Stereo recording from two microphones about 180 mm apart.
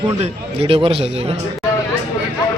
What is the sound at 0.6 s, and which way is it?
Speech, 30° right (ahead or behind).